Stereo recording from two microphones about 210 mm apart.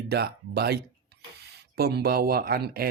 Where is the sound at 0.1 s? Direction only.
50° right (ahead or behind).